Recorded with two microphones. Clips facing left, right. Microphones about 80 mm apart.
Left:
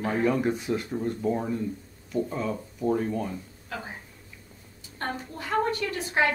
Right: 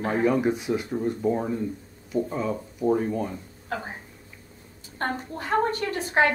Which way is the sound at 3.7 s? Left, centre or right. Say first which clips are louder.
Right 5 dB; right.